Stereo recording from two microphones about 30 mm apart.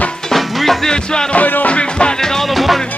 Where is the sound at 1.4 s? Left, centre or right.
Left.